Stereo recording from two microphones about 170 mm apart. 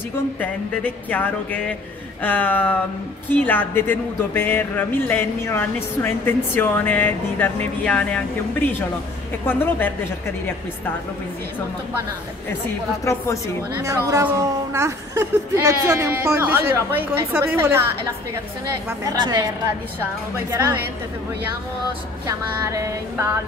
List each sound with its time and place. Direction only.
0.4 s speech: 10° left (ahead or behind)
13.7 s speech: 20° right (ahead or behind)
20.5 s speech: 15° right (ahead or behind)
22.2 s speech: 20° right (ahead or behind)